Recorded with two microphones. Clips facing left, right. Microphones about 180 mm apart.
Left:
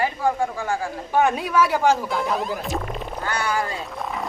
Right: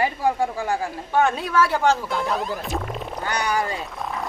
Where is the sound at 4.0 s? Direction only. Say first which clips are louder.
Left 3 dB; centre (ahead or behind).